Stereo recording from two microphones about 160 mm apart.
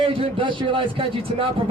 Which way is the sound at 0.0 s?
35° right (ahead or behind).